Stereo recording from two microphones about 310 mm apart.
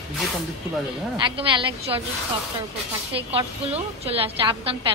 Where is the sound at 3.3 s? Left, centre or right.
Centre.